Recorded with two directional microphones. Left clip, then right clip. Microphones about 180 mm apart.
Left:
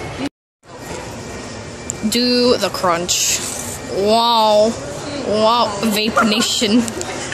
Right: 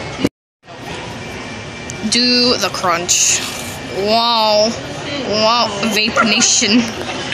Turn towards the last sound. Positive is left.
turn(degrees=20)  # may be behind; listen again after turning